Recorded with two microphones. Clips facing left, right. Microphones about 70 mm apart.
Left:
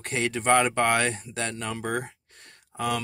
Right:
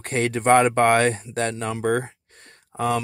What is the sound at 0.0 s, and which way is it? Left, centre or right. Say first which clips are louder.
Speech: right 5 dB; right.